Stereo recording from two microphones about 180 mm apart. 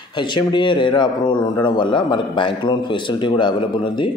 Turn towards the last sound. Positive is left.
turn(degrees=25)  # may be behind; listen again after turning